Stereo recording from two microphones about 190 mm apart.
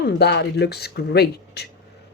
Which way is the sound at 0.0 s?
60° left (ahead or behind).